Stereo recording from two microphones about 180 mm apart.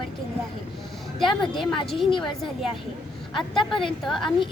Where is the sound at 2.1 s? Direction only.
25° left (ahead or behind).